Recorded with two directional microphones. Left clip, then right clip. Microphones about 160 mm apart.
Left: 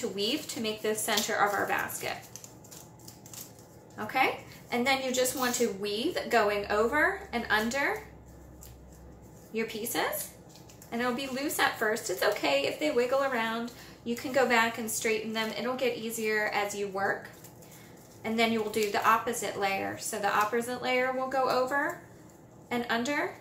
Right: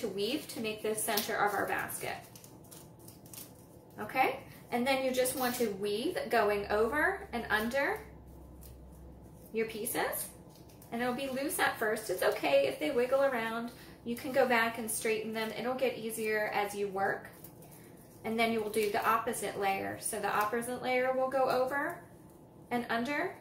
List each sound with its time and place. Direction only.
0.1 s a woman's voice: 20° left (ahead or behind)
3.9 s a woman's voice: 15° left (ahead or behind)
9.5 s a woman's voice: 15° left (ahead or behind)
18.2 s a woman's voice: 15° left (ahead or behind)